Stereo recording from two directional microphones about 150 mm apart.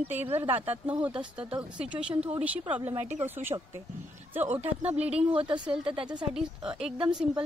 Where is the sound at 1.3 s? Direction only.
5° right (ahead or behind).